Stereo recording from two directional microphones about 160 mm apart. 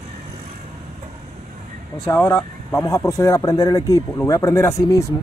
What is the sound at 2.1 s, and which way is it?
Speech, 15° left (ahead or behind).